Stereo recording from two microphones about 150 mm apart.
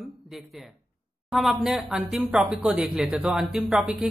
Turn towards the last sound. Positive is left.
turn(degrees=-5)  # may be behind; listen again after turning